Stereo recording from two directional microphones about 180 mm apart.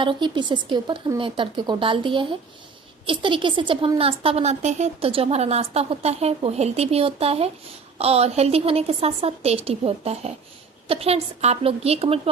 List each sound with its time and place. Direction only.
0.0 s a woman's voice: 25° right (ahead or behind)